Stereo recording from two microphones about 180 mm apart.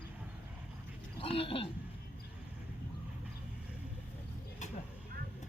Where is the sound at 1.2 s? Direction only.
30° left (ahead or behind).